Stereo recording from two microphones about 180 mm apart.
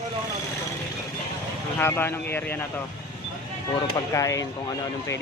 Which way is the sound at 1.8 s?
10° left (ahead or behind).